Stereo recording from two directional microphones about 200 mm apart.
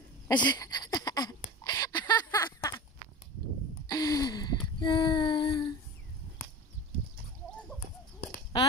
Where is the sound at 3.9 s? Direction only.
15° left (ahead or behind).